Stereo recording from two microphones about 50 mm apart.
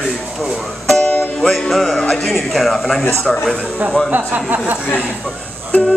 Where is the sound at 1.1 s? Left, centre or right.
Centre.